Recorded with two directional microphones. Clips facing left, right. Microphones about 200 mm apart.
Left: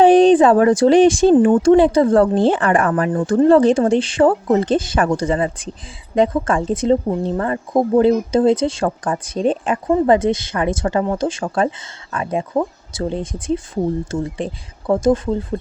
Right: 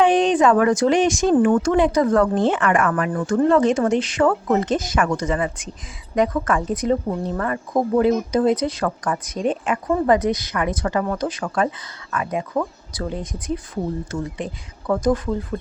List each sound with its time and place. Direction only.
0.0 s speech: 35° left (ahead or behind)